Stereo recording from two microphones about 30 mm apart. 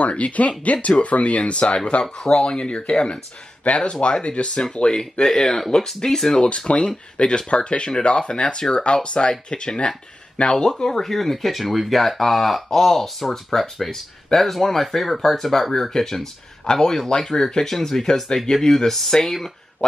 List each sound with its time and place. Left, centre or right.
0.2 s speech: left; by 6.4 s centre
6.7 s speech: left
10.8 s speech: centre
15.9 s speech: centre